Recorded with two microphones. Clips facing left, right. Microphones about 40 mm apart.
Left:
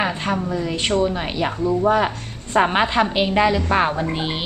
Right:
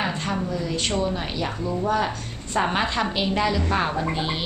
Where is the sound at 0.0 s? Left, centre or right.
Left.